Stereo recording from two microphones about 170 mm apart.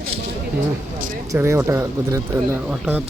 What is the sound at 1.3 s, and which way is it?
Speech, 15° right (ahead or behind).